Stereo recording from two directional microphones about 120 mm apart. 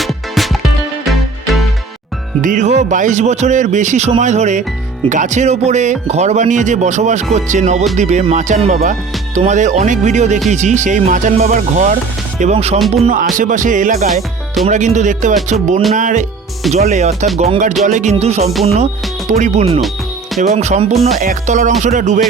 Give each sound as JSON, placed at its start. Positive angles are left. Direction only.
{"t": 0.0, "sound": "music", "side_deg": 0}
{"t": 2.4, "sound": "speech", "side_deg": -90}
{"t": 5.0, "sound": "speech", "side_deg": -90}
{"t": 12.4, "sound": "speech", "side_deg": -65}
{"t": 12.9, "sound": "speech", "side_deg": -80}
{"t": 14.1, "sound": "music", "side_deg": 0}
{"t": 14.7, "sound": "speech", "side_deg": -85}
{"t": 16.7, "sound": "speech", "side_deg": -70}
{"t": 17.3, "sound": "music", "side_deg": -60}
{"t": 20.4, "sound": "speech", "side_deg": -70}
{"t": 21.4, "sound": "speech", "side_deg": -90}